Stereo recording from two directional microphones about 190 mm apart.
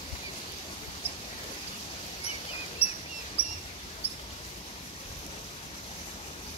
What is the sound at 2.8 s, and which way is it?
Bird vocalization, 30° left (ahead or behind).